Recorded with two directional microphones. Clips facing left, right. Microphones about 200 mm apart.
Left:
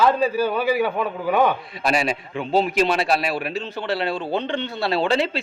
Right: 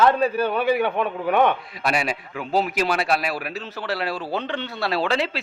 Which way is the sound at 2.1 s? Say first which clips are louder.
Left 2 dB; 25° left (ahead or behind).